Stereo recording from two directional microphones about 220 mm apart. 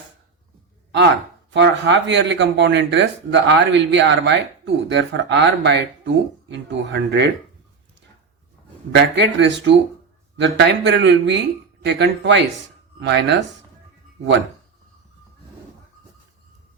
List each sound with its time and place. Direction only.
1.5 s speech: 55° right (ahead or behind)
8.9 s speech: 50° right (ahead or behind)